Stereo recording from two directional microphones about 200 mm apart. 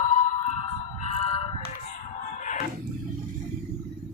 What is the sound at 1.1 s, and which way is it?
Music, 30° left (ahead or behind).